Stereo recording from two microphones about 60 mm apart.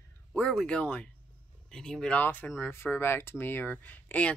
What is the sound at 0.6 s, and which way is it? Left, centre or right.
Speech, centre.